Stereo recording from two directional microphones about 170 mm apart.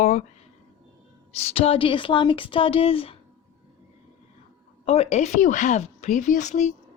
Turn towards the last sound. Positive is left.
turn(degrees=45)  # may be behind; listen again after turning